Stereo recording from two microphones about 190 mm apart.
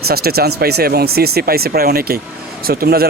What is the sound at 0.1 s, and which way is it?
A man's voice, 55° right (ahead or behind).